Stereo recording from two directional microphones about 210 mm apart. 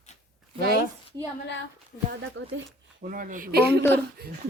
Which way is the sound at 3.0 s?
40° right (ahead or behind).